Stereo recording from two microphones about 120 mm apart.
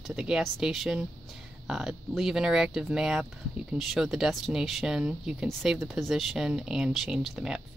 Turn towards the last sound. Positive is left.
turn(degrees=-5)  # may be behind; listen again after turning